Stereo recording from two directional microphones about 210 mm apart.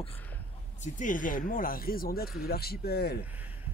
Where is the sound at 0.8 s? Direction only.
40° left (ahead or behind).